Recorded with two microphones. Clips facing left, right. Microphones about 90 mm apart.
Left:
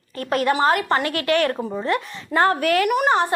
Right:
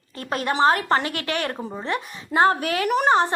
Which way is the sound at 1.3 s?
25° right (ahead or behind).